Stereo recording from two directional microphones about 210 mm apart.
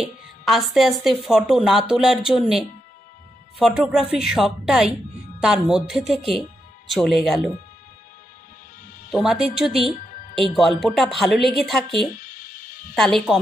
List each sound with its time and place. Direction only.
0.0 s a woman's voice: centre (ahead or behind)
9.1 s a woman's voice: centre (ahead or behind)
10.0 s music: 35° left (ahead or behind)
10.5 s a woman's voice: centre (ahead or behind)
12.2 s music: 40° left (ahead or behind)
12.9 s a woman's voice: centre (ahead or behind)